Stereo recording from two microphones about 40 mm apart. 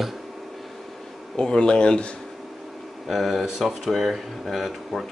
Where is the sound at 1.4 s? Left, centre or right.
Left.